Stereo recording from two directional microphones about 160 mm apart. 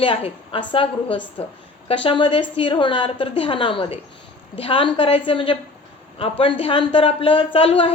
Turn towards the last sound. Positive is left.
turn(degrees=35)  # may be behind; listen again after turning